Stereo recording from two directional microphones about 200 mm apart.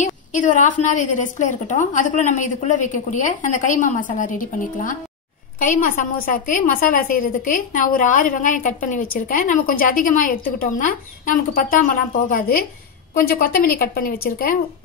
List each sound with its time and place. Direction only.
0.0 s a woman's voice: 40° left (ahead or behind)